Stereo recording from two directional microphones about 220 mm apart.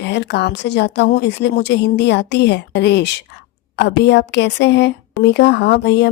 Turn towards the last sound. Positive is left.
turn(degrees=50)  # may be behind; listen again after turning